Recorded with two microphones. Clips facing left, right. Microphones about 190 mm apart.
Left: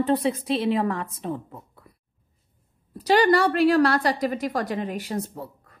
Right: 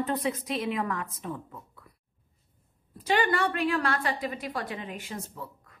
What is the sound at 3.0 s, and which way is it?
A woman's voice, 35° left (ahead or behind).